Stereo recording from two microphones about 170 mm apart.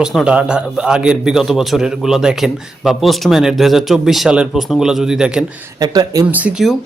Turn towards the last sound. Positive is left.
turn(degrees=-5)  # may be behind; listen again after turning